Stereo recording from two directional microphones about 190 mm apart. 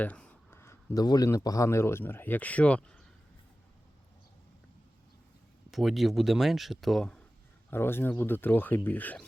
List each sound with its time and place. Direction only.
0.0 s speech: 10° left (ahead or behind)
5.7 s speech: centre (ahead or behind)